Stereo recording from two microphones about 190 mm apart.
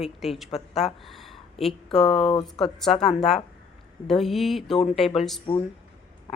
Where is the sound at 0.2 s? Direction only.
Centre (ahead or behind).